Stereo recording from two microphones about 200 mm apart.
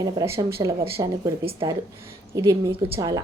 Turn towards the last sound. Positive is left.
turn(degrees=-20)  # may be behind; listen again after turning